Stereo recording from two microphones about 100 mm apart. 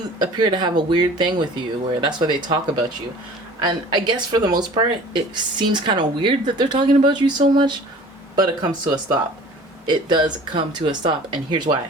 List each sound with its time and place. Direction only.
0.2 s a woman's voice: 50° right (ahead or behind)
3.6 s a woman's voice: 45° right (ahead or behind)